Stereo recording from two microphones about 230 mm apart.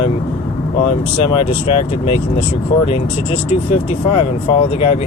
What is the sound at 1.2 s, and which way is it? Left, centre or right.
Speech, left.